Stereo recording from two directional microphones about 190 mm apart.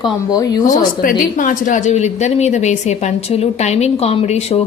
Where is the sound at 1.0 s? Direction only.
45° left (ahead or behind).